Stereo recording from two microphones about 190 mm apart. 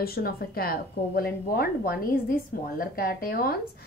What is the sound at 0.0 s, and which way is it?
A woman's voice, 55° left (ahead or behind).